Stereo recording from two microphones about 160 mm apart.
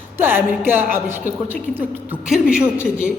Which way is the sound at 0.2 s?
15° right (ahead or behind).